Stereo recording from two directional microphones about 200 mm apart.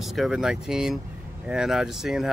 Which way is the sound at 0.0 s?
Centre (ahead or behind).